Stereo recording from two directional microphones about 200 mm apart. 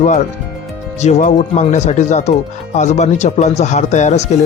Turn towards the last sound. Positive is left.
turn(degrees=35)  # may be behind; listen again after turning